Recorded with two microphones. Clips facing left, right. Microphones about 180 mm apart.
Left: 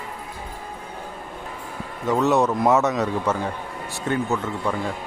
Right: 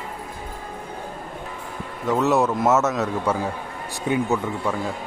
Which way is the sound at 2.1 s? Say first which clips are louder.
Even; centre (ahead or behind).